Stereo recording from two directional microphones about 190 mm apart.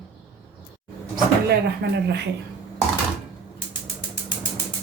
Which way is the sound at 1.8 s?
65° right (ahead or behind).